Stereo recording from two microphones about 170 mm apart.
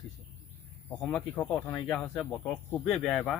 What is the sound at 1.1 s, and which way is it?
Speech, 10° left (ahead or behind).